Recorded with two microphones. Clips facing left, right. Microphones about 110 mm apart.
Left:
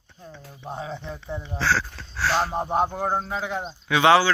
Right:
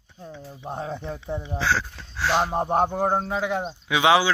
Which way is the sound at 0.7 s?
50° right (ahead or behind).